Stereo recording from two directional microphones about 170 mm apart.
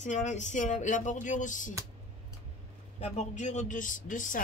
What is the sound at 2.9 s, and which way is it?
A woman's voice, 45° left (ahead or behind).